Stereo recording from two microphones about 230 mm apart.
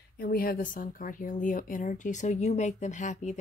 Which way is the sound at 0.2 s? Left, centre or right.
Left.